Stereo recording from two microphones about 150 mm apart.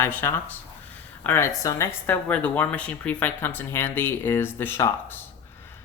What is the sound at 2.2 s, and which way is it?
Speech, 10° left (ahead or behind).